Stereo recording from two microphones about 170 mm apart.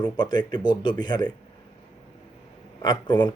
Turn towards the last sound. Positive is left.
turn(degrees=25)  # may be behind; listen again after turning